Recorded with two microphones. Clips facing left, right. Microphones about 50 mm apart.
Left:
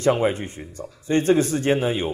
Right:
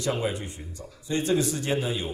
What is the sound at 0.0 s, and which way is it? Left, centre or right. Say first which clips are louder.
A man's voice: left 8 dB; left.